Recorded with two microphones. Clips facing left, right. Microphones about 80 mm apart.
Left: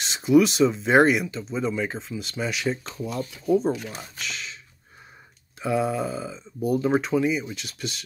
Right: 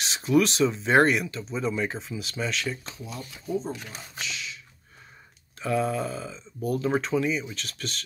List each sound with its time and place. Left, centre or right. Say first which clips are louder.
0.0 s speech: left 4 dB; centre
2.5 s speech: left 4 dB; left
2.9 s speech: left 8 dB; left
4.2 s speech: right 1 dB; left
5.6 s speech: left 2 dB; centre